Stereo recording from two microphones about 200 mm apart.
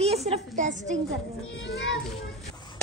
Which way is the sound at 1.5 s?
65° left (ahead or behind).